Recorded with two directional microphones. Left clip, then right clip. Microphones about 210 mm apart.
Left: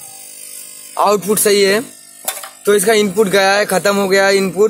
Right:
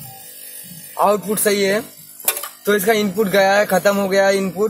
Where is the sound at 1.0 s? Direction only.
45° left (ahead or behind).